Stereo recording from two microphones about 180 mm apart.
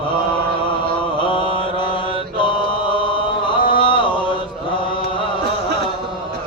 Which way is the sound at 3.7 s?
25° left (ahead or behind).